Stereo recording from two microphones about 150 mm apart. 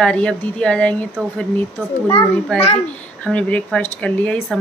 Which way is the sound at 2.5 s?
5° left (ahead or behind).